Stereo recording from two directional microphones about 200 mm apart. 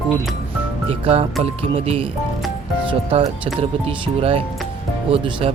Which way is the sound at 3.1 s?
25° right (ahead or behind).